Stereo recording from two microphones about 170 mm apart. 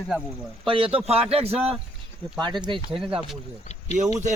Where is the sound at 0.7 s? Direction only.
30° right (ahead or behind).